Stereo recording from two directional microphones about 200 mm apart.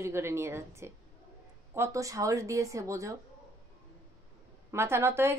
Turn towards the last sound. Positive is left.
turn(degrees=-10)  # may be behind; listen again after turning